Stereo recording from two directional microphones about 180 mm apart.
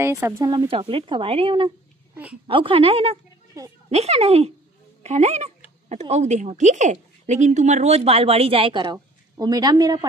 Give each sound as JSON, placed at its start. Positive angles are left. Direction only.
{"t": 0.0, "sound": "speech", "side_deg": -15}
{"t": 3.6, "sound": "speech", "side_deg": -20}
{"t": 3.9, "sound": "speech", "side_deg": -35}